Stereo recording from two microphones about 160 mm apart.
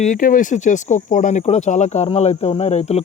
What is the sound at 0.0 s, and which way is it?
Speech, 55° left (ahead or behind).